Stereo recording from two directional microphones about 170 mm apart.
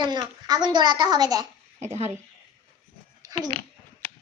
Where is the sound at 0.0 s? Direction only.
25° right (ahead or behind).